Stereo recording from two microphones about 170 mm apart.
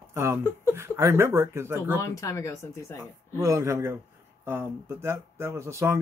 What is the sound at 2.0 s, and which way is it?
Speech, 20° left (ahead or behind).